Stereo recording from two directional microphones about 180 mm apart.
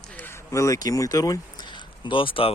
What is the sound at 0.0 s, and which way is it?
Speech, 10° left (ahead or behind).